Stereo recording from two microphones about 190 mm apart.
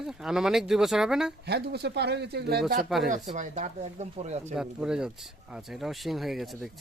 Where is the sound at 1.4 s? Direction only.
60° right (ahead or behind).